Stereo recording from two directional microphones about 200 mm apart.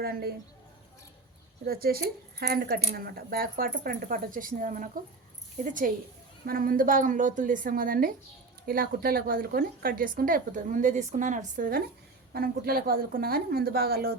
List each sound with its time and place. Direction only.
0.0 s a woman's voice: 50° right (ahead or behind)
1.6 s a woman's voice: 50° right (ahead or behind)